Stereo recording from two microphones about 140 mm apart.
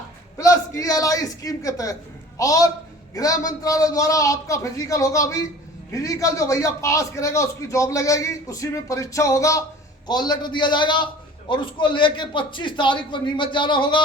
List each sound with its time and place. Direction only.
0.3 s a man's voice: 25° left (ahead or behind)